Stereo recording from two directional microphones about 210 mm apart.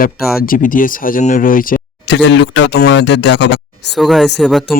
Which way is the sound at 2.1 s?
60° left (ahead or behind).